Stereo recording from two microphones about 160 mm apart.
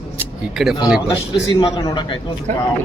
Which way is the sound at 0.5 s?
Centre (ahead or behind).